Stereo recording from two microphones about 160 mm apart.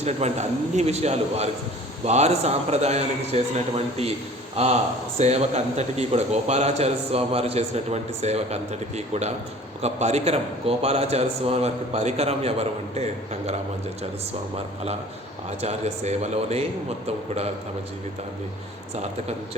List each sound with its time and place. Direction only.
0.0 s a man's voice: 45° right (ahead or behind)
15.4 s a man's voice: 45° right (ahead or behind)